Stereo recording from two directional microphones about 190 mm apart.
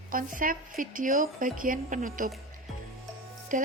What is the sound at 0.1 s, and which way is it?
A woman's voice, 45° right (ahead or behind).